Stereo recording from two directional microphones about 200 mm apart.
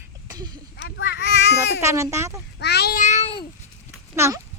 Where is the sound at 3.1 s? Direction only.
30° left (ahead or behind).